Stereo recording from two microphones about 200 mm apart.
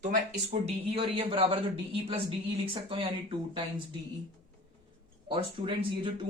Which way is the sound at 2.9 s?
25° right (ahead or behind).